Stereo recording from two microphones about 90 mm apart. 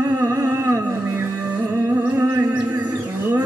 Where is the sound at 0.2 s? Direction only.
30° right (ahead or behind).